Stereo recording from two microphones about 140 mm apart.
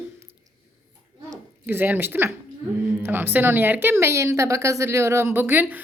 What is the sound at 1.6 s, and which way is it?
Speech, 15° right (ahead or behind).